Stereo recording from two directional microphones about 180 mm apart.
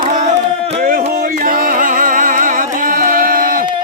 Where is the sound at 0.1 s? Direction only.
40° right (ahead or behind).